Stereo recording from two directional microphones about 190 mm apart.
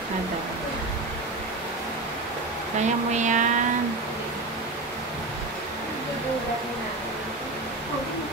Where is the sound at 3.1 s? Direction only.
40° right (ahead or behind).